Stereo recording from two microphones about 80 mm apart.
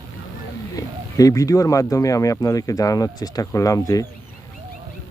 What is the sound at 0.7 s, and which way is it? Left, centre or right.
Speech, left.